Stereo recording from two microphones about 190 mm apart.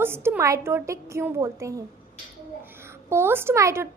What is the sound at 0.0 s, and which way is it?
A woman's voice, 10° right (ahead or behind).